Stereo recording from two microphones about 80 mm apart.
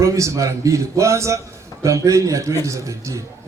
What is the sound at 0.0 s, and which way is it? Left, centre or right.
A man's voice, right.